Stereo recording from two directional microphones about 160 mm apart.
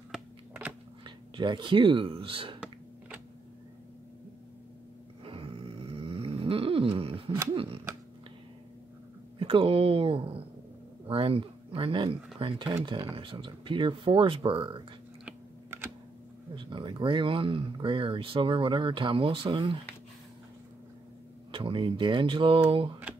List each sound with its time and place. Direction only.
0.1 s a sound: 10° right (ahead or behind)
1.0 s speech: 30° right (ahead or behind)
5.2 s snoring: 35° right (ahead or behind)
7.5 s speech: 35° right (ahead or behind)
9.4 s speech: 35° right (ahead or behind)
15.2 s computer keyboard: 15° right (ahead or behind)
16.5 s speech: 30° right (ahead or behind)
21.5 s speech: 35° right (ahead or behind)